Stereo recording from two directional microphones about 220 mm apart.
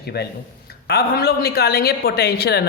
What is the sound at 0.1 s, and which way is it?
Speech, 45° left (ahead or behind).